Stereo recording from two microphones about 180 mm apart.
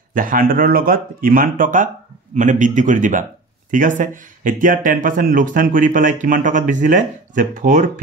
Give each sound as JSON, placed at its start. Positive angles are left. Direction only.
{"t": 0.1, "sound": "speech", "side_deg": -50}